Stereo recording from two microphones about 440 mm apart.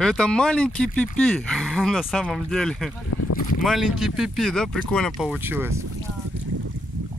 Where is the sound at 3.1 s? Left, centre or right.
Left.